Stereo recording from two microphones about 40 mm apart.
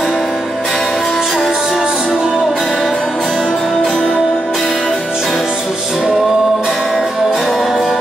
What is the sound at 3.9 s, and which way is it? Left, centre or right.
Music, centre.